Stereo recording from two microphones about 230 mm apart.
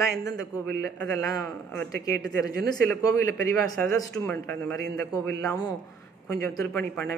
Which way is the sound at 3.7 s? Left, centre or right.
Centre.